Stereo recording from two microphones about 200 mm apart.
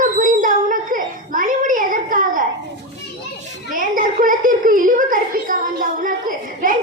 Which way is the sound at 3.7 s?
40° right (ahead or behind).